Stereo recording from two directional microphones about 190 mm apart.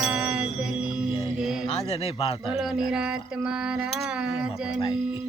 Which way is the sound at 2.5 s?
Centre (ahead or behind).